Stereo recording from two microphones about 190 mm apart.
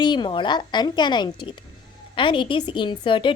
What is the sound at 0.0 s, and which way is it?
A woman's voice, 25° left (ahead or behind).